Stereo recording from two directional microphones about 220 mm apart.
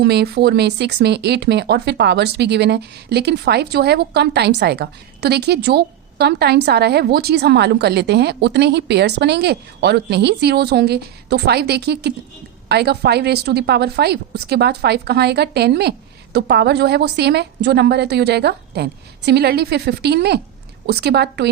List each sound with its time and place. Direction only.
0.0 s speech: 50° right (ahead or behind)